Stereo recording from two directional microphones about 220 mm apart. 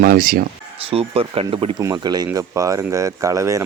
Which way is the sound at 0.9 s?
25° right (ahead or behind).